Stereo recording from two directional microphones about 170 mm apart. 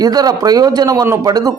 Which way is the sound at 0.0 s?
20° right (ahead or behind).